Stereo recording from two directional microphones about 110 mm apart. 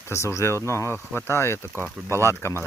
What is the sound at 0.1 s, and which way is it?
Speech, 25° left (ahead or behind).